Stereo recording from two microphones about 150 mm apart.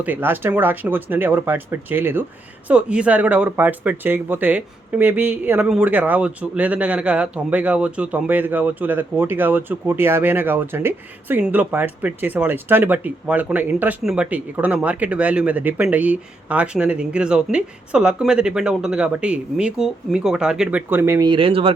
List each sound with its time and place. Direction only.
0.0 s speech: 10° right (ahead or behind)
21.2 s speech: 35° right (ahead or behind)